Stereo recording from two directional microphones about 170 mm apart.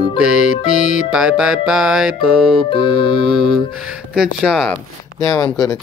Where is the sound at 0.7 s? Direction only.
55° left (ahead or behind).